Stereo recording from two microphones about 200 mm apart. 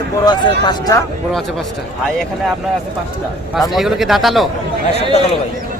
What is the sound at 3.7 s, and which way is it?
Speech, centre (ahead or behind).